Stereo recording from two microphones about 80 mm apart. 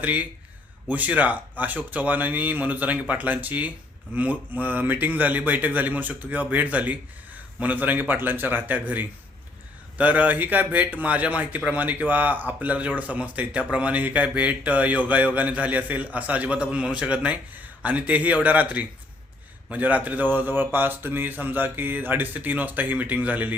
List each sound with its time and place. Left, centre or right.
0.0 s speech: centre